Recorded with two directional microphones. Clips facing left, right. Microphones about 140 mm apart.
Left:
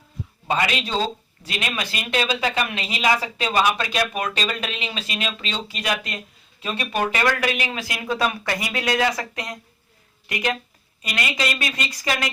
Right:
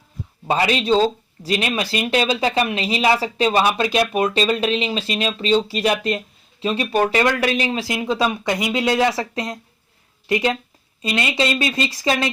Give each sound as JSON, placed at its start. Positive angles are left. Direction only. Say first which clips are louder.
{"t": 0.4, "sound": "speech", "louder": "right 5 dB", "side_deg": -30}